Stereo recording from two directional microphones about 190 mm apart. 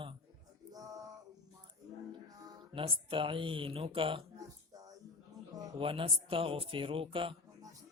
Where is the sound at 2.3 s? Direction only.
20° right (ahead or behind).